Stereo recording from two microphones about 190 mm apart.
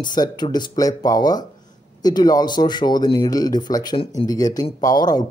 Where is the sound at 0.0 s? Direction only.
20° left (ahead or behind).